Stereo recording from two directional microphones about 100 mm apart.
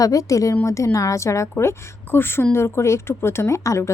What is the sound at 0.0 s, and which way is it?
A woman's voice, 35° left (ahead or behind).